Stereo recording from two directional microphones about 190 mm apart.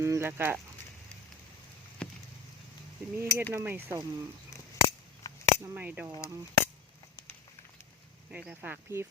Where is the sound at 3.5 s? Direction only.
10° right (ahead or behind).